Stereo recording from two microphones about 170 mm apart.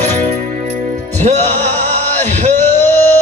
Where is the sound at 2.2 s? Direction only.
45° right (ahead or behind).